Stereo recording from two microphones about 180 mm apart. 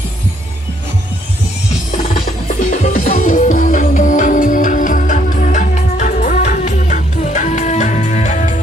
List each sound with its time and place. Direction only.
2.1 s music: 45° left (ahead or behind)